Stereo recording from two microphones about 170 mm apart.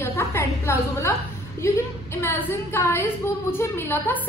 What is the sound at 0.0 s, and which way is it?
A woman's voice, 15° left (ahead or behind).